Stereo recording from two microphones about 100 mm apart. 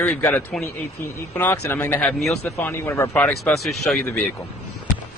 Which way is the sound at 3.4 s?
Centre (ahead or behind).